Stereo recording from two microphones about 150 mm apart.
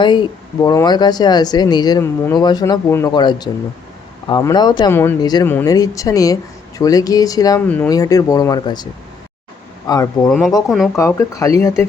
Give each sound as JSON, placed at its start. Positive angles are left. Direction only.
{"t": 0.0, "sound": "speech", "side_deg": 30}
{"t": 4.9, "sound": "speech", "side_deg": 15}
{"t": 5.2, "sound": "speech", "side_deg": 25}
{"t": 5.5, "sound": "speech", "side_deg": 15}
{"t": 10.2, "sound": "speech", "side_deg": 0}
{"t": 10.9, "sound": "speech", "side_deg": 20}